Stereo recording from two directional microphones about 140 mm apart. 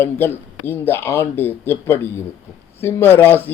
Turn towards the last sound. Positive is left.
turn(degrees=15)  # may be behind; listen again after turning